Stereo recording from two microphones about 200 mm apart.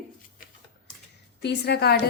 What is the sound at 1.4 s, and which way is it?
Speech, 55° left (ahead or behind).